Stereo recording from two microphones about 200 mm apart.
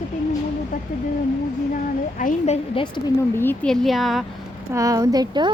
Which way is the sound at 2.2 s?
35° left (ahead or behind).